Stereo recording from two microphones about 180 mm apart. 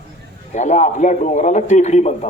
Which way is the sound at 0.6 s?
40° left (ahead or behind).